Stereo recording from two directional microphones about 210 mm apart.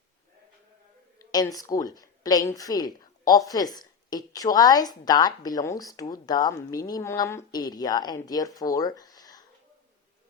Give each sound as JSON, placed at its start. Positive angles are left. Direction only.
{"t": 1.3, "sound": "a woman's voice", "side_deg": 15}